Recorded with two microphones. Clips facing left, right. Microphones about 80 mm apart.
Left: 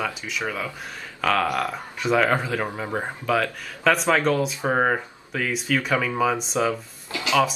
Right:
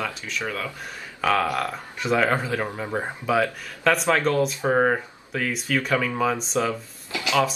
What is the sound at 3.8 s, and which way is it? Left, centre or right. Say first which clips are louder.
Speech: left 1 dB; centre.